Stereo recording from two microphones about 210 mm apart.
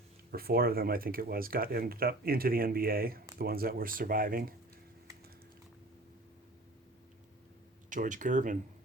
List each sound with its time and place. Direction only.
0.3 s speech: 45° right (ahead or behind)
7.9 s speech: 35° right (ahead or behind)